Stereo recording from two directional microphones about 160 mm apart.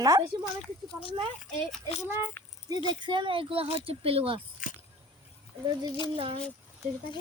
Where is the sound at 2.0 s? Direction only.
15° right (ahead or behind).